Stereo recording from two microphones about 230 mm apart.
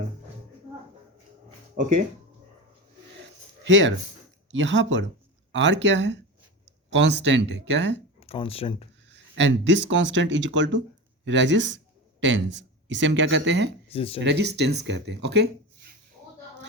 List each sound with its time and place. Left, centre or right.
3.6 s speech: right
8.3 s speech: left
9.0 s speech: right
13.9 s speech: left
14.3 s speech: right